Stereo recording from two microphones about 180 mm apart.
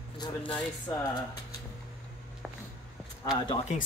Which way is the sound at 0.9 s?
15° left (ahead or behind).